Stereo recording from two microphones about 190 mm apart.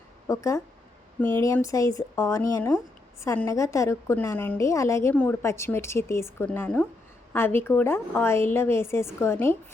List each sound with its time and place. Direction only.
0.3 s a woman's voice: 15° left (ahead or behind)